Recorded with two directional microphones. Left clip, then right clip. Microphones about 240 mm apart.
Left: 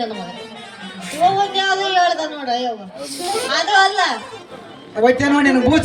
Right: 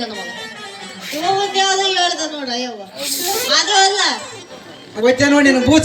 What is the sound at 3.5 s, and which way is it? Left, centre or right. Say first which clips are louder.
A man's voice: right 1 dB; left.